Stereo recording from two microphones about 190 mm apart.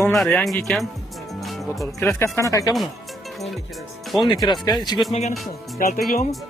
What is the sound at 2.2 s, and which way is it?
Speech, 15° left (ahead or behind).